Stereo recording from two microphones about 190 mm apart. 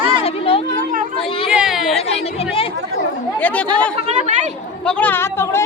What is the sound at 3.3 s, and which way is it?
Speech, 10° left (ahead or behind).